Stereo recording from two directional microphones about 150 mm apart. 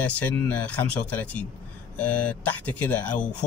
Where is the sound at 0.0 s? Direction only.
10° left (ahead or behind).